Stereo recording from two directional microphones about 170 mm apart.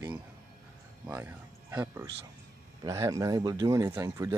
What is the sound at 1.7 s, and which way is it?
Speech, 15° right (ahead or behind).